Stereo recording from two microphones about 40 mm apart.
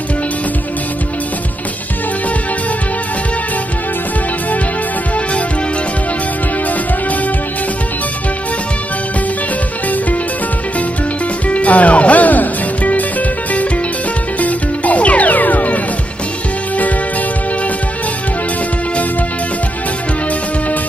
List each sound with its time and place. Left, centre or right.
11.4 s music: left
14.4 s music: left